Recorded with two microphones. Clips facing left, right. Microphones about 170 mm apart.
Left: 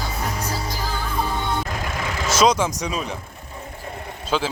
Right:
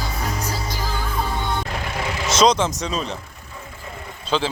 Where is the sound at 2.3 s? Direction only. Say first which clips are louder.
Right 1 dB; 10° left (ahead or behind).